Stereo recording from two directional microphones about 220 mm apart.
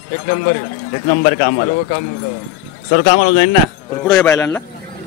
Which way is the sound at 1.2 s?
40° left (ahead or behind).